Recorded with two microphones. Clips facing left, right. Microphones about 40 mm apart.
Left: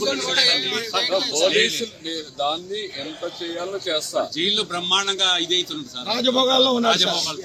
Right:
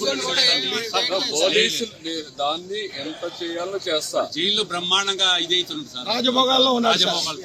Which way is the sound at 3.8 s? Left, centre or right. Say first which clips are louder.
Even; left.